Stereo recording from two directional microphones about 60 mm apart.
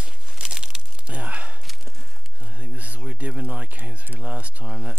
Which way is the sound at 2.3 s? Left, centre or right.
Right.